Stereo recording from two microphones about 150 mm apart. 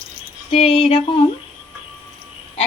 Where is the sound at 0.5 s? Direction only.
40° left (ahead or behind).